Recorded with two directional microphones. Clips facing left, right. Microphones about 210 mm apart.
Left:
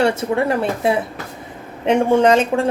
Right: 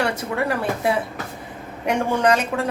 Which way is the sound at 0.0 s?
25° left (ahead or behind).